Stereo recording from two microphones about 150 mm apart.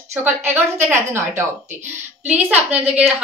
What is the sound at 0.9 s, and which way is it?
A woman's voice, 15° right (ahead or behind).